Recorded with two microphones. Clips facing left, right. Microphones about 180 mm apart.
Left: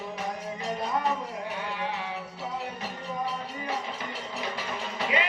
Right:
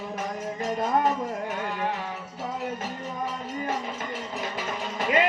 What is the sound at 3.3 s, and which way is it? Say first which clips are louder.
Speech: right 3 dB; 45° right (ahead or behind).